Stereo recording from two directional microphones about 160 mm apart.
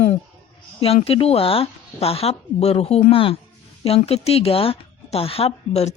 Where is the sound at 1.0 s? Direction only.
35° left (ahead or behind).